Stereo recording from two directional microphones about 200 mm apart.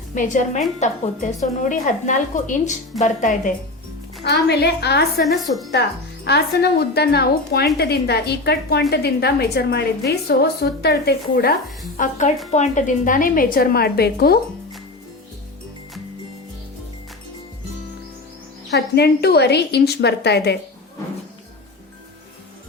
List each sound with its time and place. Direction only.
0.1 s a woman's voice: 40° left (ahead or behind)
4.2 s a woman's voice: 55° left (ahead or behind)
5.2 s a woman's voice: centre (ahead or behind)
6.2 s a woman's voice: 55° left (ahead or behind)
11.9 s a woman's voice: 35° left (ahead or behind)
18.9 s a woman's voice: 55° left (ahead or behind)